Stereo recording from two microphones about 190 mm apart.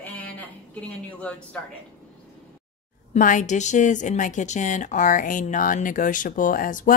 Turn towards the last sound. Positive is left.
turn(degrees=45)  # may be behind; listen again after turning